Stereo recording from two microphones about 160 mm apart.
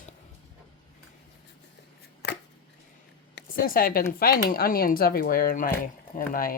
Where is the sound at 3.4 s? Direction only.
65° left (ahead or behind).